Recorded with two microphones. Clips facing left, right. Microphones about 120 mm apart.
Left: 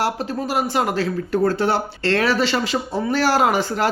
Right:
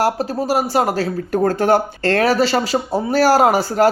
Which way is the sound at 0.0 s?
40° right (ahead or behind).